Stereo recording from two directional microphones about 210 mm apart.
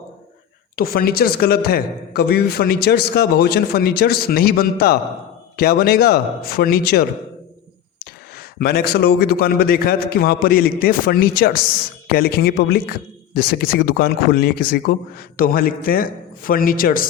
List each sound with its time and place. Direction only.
0.8 s speech: 45° left (ahead or behind)
8.4 s speech: 45° left (ahead or behind)